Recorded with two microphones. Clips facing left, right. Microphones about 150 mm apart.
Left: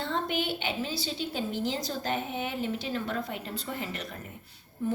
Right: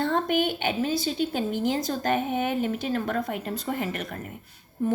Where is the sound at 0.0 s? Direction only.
50° right (ahead or behind).